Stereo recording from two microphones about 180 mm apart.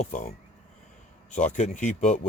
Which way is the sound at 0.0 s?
45° left (ahead or behind).